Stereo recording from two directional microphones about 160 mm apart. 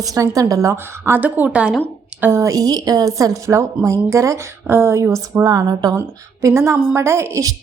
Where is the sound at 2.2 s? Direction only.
20° right (ahead or behind).